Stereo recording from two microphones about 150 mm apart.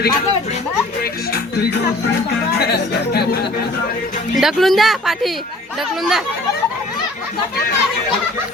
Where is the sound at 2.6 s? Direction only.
90° left.